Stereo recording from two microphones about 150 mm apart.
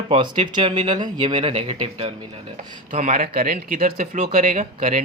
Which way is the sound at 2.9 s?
60° right (ahead or behind).